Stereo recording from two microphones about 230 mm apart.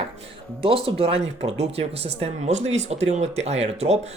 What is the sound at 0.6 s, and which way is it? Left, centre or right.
Speech, right.